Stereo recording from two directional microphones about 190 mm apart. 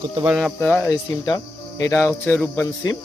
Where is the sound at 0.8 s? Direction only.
20° left (ahead or behind).